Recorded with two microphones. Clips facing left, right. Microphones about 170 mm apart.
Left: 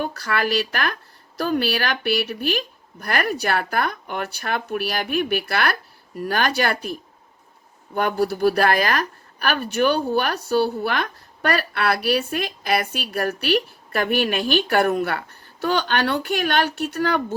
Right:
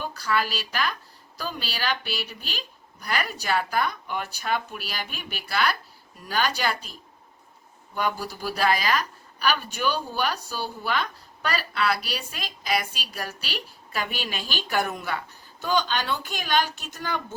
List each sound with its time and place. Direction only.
0.0 s a woman's voice: 60° left (ahead or behind)